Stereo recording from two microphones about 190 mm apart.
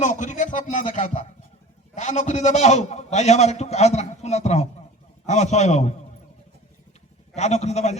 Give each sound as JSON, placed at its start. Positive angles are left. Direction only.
{"t": 0.0, "sound": "a man's voice", "side_deg": 40}
{"t": 7.3, "sound": "a man's voice", "side_deg": 35}